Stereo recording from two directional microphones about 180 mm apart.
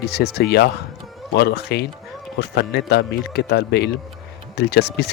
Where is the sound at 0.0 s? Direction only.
65° left (ahead or behind).